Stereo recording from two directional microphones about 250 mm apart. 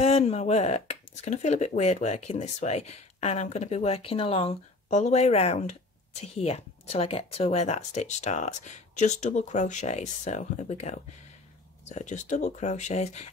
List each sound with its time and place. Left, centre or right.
0.0 s speech: left